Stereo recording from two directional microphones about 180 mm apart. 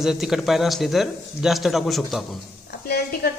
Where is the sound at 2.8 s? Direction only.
60° left (ahead or behind).